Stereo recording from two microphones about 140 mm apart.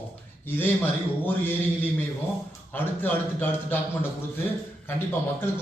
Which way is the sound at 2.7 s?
15° left (ahead or behind).